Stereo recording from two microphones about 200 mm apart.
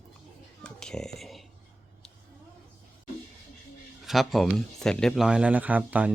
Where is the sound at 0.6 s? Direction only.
5° left (ahead or behind).